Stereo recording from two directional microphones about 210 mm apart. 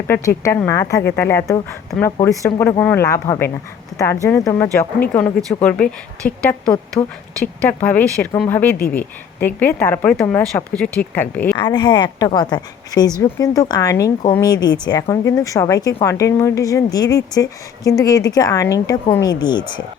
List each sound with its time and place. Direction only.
0.1 s speech: 10° left (ahead or behind)
11.5 s a woman's voice: 20° left (ahead or behind)